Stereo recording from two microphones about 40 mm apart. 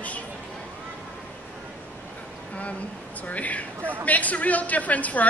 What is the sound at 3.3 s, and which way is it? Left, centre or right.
Speech, left.